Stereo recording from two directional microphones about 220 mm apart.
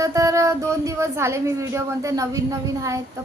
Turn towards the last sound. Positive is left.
turn(degrees=-15)  # may be behind; listen again after turning